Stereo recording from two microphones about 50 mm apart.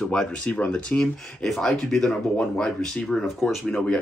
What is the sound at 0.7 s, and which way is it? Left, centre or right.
Speech, centre.